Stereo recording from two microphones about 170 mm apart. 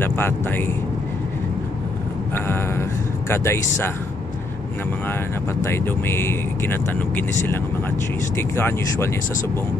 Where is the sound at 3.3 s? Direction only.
15° left (ahead or behind).